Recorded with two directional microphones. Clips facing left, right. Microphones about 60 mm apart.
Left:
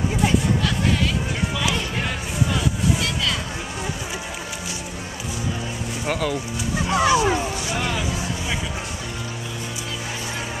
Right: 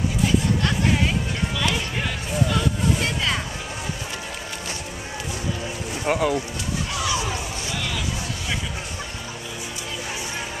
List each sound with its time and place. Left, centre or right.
6.0 s speech: centre
6.9 s vehicle: left